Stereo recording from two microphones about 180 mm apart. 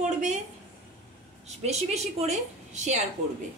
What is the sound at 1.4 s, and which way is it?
Speech, 40° right (ahead or behind).